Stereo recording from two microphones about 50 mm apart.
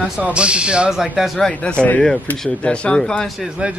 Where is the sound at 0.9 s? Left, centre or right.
Centre.